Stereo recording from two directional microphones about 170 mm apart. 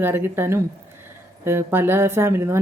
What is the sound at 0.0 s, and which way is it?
Speech, 10° right (ahead or behind).